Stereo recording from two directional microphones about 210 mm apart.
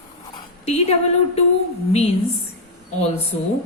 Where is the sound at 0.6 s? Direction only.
30° left (ahead or behind).